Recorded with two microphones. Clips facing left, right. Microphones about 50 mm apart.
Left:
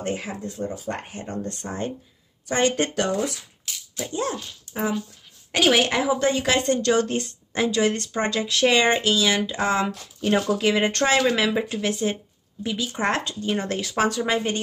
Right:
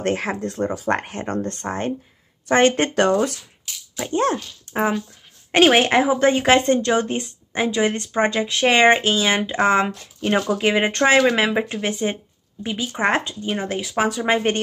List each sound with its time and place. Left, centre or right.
0.0 s speech: right
5.5 s a woman's voice: right; by 14.2 s centre
14.2 s speech: right